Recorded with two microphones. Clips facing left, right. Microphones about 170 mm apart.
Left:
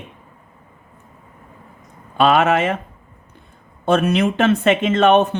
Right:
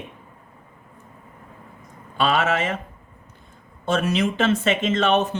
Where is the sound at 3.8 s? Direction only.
55° left (ahead or behind).